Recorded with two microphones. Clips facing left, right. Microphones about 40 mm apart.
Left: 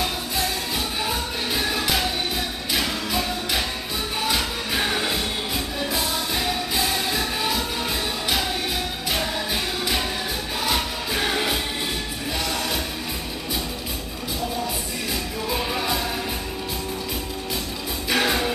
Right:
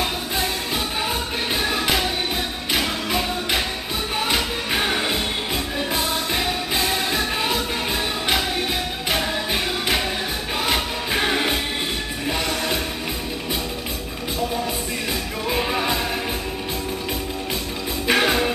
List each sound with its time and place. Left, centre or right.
1.5 s music: right
6.3 s music: right
9.1 s music: right
15.5 s music: right
18.1 s music: right